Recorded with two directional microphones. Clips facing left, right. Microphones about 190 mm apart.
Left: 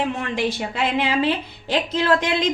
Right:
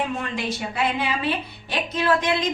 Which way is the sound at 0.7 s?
90° left.